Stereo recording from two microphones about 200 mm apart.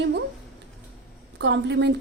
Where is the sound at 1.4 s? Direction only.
60° right (ahead or behind).